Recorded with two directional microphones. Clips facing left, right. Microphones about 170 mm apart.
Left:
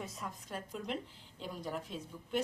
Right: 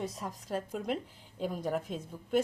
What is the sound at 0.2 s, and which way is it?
A woman's voice, 40° right (ahead or behind).